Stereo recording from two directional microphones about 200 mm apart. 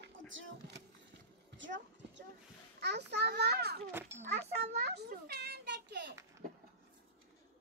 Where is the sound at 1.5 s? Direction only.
65° right (ahead or behind).